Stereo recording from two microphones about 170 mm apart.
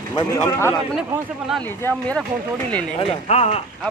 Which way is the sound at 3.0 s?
40° left (ahead or behind).